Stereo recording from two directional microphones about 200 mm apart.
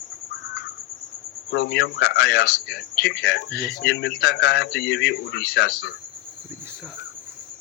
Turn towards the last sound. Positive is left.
turn(degrees=55)  # may be behind; listen again after turning